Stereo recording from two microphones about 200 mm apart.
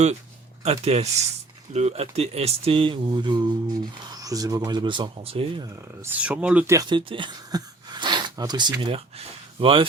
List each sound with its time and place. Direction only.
0.6 s speech: 30° right (ahead or behind)
5.6 s speech: 10° right (ahead or behind); by 9.8 s 25° right (ahead or behind)